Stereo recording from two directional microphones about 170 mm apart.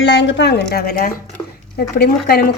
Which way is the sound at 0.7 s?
65° left (ahead or behind).